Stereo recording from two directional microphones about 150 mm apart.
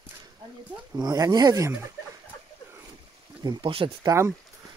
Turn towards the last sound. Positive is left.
turn(degrees=-15)  # may be behind; listen again after turning